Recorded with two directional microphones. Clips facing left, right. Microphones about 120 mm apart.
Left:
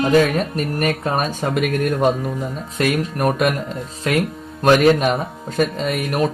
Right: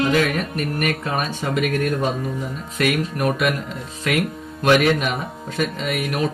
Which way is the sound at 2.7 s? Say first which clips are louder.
Left 1 dB; 40° left (ahead or behind).